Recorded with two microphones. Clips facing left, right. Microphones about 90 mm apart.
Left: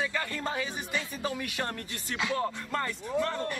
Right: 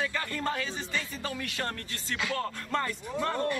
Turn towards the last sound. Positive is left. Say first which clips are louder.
# left 1 dB
turn(degrees=0)  # may be behind; listen again after turning